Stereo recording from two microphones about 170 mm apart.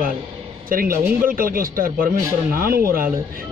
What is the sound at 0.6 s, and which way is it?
A man's voice, 55° right (ahead or behind).